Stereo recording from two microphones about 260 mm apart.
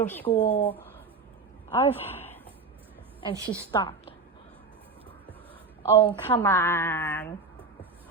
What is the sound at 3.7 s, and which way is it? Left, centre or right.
Speech, centre.